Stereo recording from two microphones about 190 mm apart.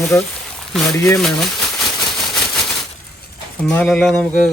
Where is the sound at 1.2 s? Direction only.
Centre (ahead or behind).